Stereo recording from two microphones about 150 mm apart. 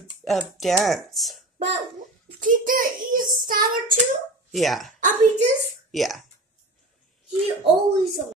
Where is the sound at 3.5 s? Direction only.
70° right (ahead or behind).